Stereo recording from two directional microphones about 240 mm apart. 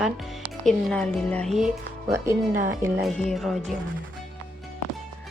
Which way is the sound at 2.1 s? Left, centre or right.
Centre.